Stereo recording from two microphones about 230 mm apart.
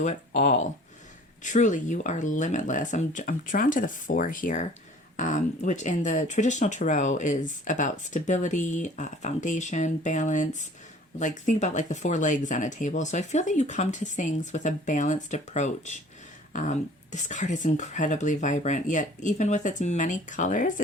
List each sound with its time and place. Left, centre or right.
0.0 s speech: left